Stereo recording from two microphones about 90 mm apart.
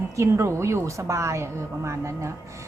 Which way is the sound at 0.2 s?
35° right (ahead or behind).